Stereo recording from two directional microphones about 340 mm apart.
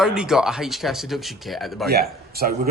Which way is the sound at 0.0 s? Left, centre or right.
Centre.